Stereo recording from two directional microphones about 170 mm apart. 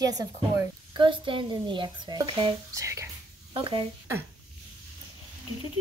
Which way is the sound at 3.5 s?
30° right (ahead or behind).